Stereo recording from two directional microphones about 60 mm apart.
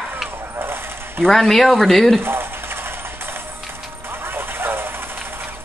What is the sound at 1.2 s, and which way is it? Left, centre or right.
Speech, centre.